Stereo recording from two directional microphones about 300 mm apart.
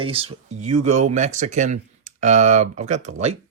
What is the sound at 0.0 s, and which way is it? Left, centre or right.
Speech, centre.